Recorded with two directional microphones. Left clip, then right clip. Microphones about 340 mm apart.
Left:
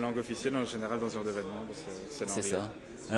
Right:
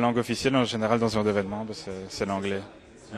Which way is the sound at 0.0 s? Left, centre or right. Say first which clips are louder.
Right 9 dB; right.